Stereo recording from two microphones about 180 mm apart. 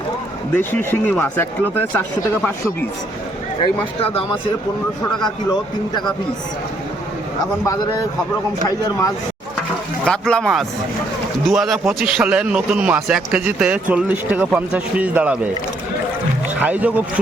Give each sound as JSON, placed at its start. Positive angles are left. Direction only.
{"t": 0.5, "sound": "speech", "side_deg": 10}
{"t": 5.2, "sound": "a man's voice", "side_deg": 25}
{"t": 10.1, "sound": "a man's voice", "side_deg": 5}
{"t": 16.6, "sound": "a man's voice", "side_deg": -10}